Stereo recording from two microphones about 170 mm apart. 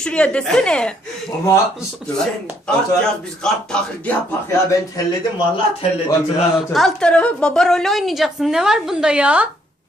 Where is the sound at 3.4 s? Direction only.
5° left (ahead or behind).